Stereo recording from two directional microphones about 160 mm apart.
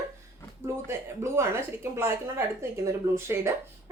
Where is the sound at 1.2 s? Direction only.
15° right (ahead or behind).